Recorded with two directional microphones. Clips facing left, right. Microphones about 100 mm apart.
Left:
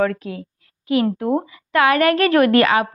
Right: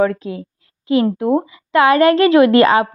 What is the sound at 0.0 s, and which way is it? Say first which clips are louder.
A woman's voice: right 4 dB; 25° right (ahead or behind).